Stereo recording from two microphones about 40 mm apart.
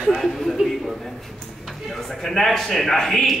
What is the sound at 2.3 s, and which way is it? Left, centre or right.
A man's voice, centre.